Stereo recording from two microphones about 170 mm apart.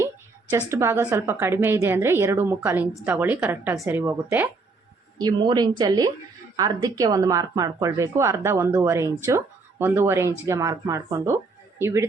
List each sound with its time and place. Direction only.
0.7 s a woman's voice: 15° right (ahead or behind)
5.1 s a woman's voice: 25° right (ahead or behind)